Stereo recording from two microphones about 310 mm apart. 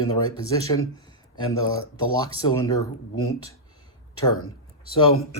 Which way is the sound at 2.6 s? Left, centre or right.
Centre.